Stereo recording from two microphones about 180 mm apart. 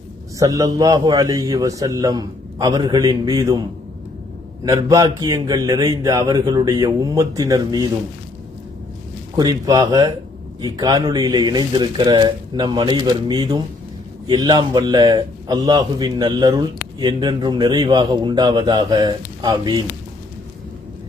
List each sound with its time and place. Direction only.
0.3 s a man's voice: 20° right (ahead or behind)
9.3 s a man's voice: 20° right (ahead or behind)